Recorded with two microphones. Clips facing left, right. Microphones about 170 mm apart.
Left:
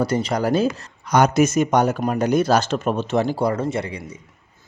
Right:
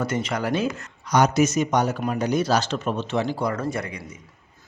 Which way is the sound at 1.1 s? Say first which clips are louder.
Left 3 dB; 55° left (ahead or behind).